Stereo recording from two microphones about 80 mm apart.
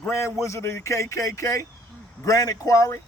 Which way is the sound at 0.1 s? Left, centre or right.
Left.